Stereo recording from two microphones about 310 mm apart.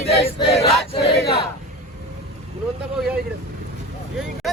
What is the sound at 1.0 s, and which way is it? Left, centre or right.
Battle cry, left.